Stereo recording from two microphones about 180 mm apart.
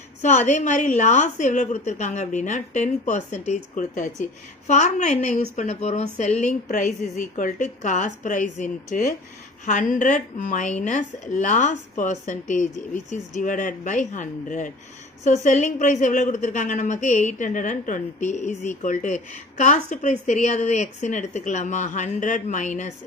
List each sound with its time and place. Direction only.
0.2 s a woman's voice: 40° left (ahead or behind)